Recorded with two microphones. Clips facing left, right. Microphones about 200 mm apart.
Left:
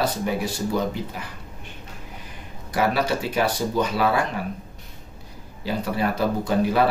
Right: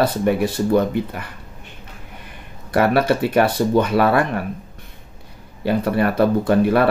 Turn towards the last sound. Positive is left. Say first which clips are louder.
# right 5 dB
turn(degrees=-60)  # may be behind; listen again after turning